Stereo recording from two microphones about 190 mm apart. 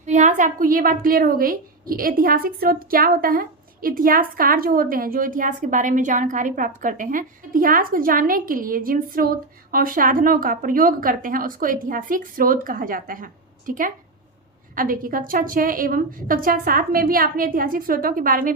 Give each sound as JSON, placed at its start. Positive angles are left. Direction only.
{"t": 0.0, "sound": "a woman's voice", "side_deg": -40}